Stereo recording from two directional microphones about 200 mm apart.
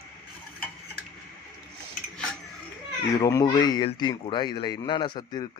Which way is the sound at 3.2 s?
20° left (ahead or behind).